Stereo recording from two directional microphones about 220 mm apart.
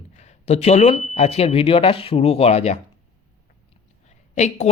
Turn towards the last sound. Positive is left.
turn(degrees=30)  # may be behind; listen again after turning